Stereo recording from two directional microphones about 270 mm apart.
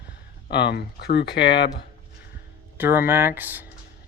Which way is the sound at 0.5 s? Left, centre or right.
Left.